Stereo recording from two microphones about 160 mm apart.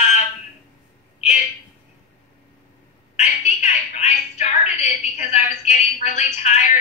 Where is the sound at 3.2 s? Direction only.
45° left (ahead or behind).